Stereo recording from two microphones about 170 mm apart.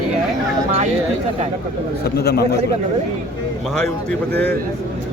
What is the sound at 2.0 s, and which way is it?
Speech, 70° left (ahead or behind).